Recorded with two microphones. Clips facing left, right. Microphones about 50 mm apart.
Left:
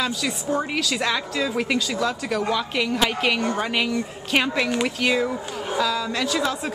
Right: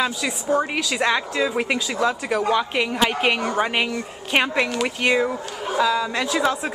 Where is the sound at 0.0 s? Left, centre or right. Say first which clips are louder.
Right 2 dB; centre.